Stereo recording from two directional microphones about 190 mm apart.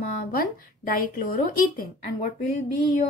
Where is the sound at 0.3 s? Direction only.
50° left (ahead or behind).